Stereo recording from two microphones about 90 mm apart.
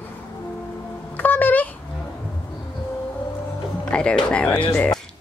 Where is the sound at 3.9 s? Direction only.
10° left (ahead or behind).